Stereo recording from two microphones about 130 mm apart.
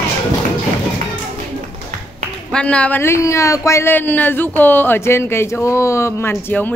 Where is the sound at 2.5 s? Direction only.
10° left (ahead or behind).